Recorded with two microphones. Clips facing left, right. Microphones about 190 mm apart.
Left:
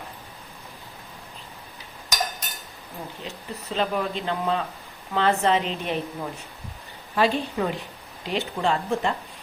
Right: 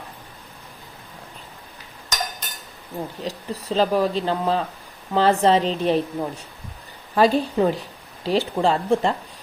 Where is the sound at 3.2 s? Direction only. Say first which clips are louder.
Right 6 dB; 35° right (ahead or behind).